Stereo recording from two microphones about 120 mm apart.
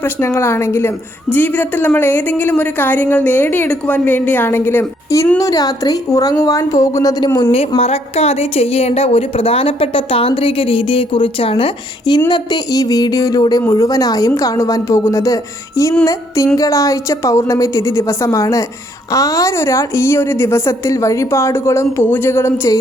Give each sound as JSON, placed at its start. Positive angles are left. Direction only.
{"t": 0.0, "sound": "a woman's voice", "side_deg": 20}
{"t": 7.8, "sound": "a woman's voice", "side_deg": 60}